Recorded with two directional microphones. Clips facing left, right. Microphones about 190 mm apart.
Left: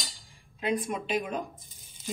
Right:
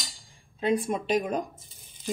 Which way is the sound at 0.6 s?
30° right (ahead or behind).